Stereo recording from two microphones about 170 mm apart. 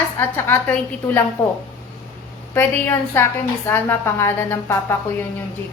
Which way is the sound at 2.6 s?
15° left (ahead or behind).